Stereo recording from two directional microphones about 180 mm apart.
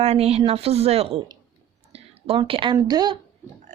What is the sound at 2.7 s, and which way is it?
Speech, 20° right (ahead or behind).